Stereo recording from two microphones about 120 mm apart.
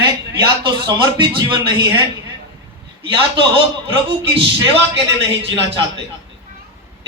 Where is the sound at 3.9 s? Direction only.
50° right (ahead or behind).